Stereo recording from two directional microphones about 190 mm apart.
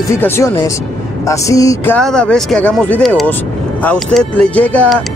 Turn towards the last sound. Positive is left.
turn(degrees=5)  # may be behind; listen again after turning